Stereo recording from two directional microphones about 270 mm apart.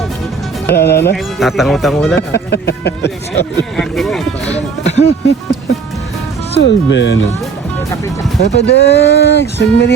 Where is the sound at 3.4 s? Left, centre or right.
Centre.